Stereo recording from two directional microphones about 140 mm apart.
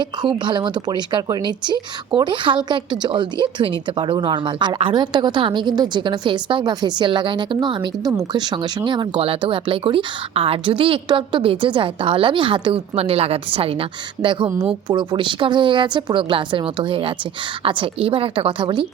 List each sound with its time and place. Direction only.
0.0 s a woman's voice: 30° right (ahead or behind)